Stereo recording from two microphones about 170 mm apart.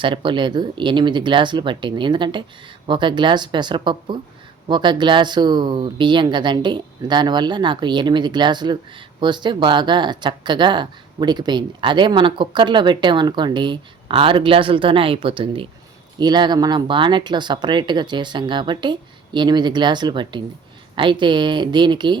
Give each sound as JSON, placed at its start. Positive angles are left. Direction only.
{"t": 0.0, "sound": "speech", "side_deg": -30}